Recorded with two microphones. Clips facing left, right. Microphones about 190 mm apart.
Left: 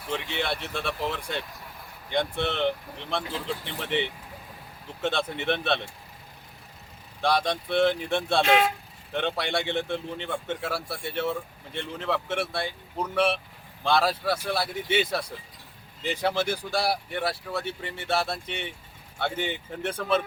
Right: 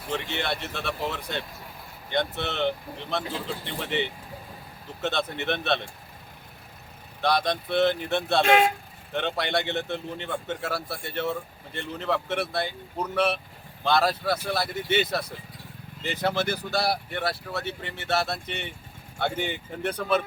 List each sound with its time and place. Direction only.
0.1 s speech: centre (ahead or behind)
5.5 s speech: 5° left (ahead or behind)
7.3 s speech: 10° left (ahead or behind)
7.9 s speech: 5° right (ahead or behind)
8.4 s speech: 50° right (ahead or behind)
9.1 s speech: centre (ahead or behind)
9.6 s speech: 5° right (ahead or behind)
10.6 s speech: 10° left (ahead or behind)
11.3 s speech: 5° right (ahead or behind)
12.5 s speech: 10° left (ahead or behind)
16.0 s speech: 5° right (ahead or behind)
16.4 s speech: 10° left (ahead or behind)
17.7 s speech: 5° right (ahead or behind)